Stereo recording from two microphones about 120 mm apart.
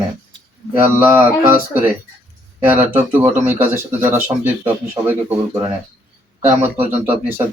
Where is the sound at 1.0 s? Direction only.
20° right (ahead or behind).